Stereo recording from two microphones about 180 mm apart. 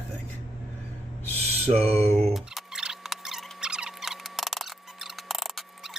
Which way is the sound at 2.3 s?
Centre (ahead or behind).